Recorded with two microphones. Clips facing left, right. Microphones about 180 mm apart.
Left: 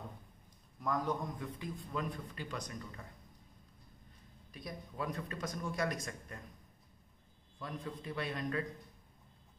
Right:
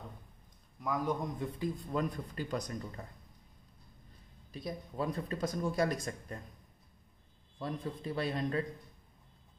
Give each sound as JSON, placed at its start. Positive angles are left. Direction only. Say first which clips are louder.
{"t": 0.7, "sound": "a man's voice", "louder": "right 2 dB", "side_deg": -5}
{"t": 1.4, "sound": "speech", "louder": "right 6 dB", "side_deg": -30}
{"t": 4.5, "sound": "speech", "louder": "right 6 dB", "side_deg": -25}
{"t": 7.6, "sound": "speech", "louder": "right 5 dB", "side_deg": -35}